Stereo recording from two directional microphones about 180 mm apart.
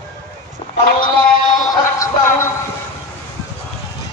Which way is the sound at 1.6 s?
20° left (ahead or behind).